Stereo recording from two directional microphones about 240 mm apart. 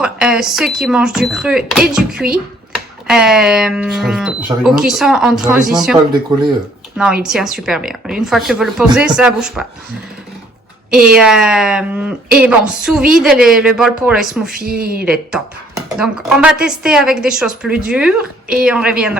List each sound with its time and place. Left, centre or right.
0.0 s a woman's voice: centre
10.9 s a woman's voice: centre
14.5 s a woman's voice: right
15.0 s a woman's voice: centre